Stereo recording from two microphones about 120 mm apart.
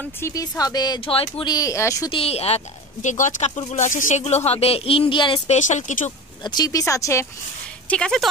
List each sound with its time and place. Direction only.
0.2 s speech: 30° left (ahead or behind)
1.0 s speech: 55° left (ahead or behind)
1.4 s speech: 30° left (ahead or behind)
2.0 s speech: 50° left (ahead or behind); by 4.4 s 70° left (ahead or behind)
4.5 s speech: 55° left (ahead or behind)
5.5 s speech: 85° left
6.4 s speech: 35° left (ahead or behind)
7.9 s speech: 5° left (ahead or behind)